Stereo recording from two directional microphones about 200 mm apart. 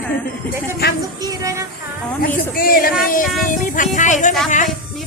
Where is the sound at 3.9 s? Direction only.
40° left (ahead or behind).